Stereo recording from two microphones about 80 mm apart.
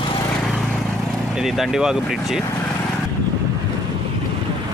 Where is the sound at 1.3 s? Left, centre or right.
Centre.